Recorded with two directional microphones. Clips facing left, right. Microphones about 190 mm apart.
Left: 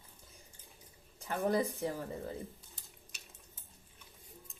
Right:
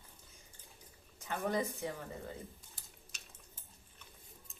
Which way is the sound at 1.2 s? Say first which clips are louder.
Left 4 dB; 35° left (ahead or behind).